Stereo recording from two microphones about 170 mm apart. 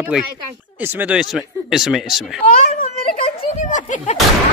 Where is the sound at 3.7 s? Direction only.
45° left (ahead or behind).